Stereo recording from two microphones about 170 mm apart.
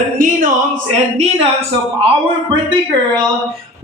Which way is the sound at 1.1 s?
40° right (ahead or behind).